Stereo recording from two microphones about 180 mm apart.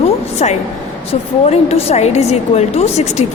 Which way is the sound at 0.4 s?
35° left (ahead or behind).